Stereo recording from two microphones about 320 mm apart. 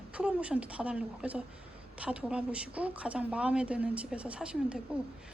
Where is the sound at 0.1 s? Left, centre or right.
Centre.